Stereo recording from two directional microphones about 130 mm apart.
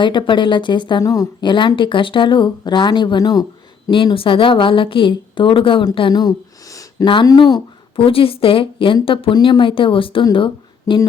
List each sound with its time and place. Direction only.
0.0 s a woman's voice: 35° left (ahead or behind)
3.8 s a woman's voice: 40° left (ahead or behind)
7.0 s a woman's voice: 40° left (ahead or behind)
10.3 s a sound: 40° left (ahead or behind)